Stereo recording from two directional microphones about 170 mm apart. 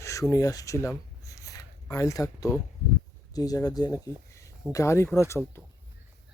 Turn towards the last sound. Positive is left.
turn(degrees=15)  # may be behind; listen again after turning